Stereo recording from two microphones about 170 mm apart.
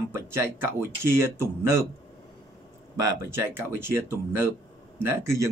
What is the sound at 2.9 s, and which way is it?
Speech, 15° right (ahead or behind).